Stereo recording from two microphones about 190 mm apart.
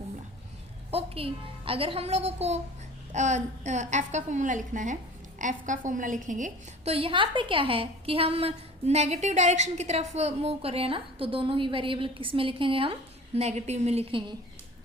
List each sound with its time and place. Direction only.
0.9 s a child's voice: 30° right (ahead or behind)